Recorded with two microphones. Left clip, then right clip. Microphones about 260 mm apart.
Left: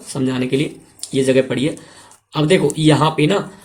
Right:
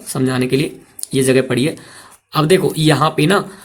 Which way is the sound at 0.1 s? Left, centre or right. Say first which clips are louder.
Right 2 dB; right.